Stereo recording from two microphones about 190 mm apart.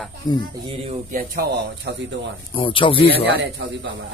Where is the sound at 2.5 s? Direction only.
25° left (ahead or behind).